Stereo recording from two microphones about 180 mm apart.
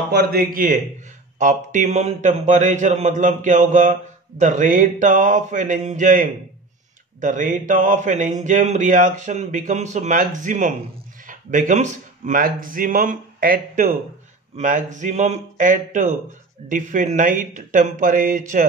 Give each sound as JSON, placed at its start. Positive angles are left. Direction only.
{"t": 0.1, "sound": "a man's voice", "side_deg": -55}